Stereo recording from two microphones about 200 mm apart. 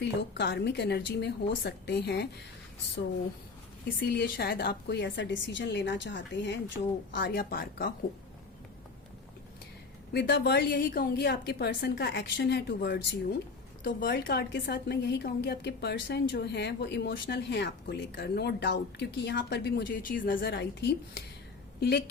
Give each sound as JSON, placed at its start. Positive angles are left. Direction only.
{"t": 0.0, "sound": "a woman's voice", "side_deg": 60}
{"t": 3.8, "sound": "a woman's voice", "side_deg": 50}
{"t": 10.1, "sound": "a woman's voice", "side_deg": 55}